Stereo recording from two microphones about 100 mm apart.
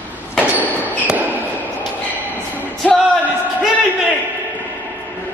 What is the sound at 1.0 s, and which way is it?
Basketball bounce, 15° right (ahead or behind).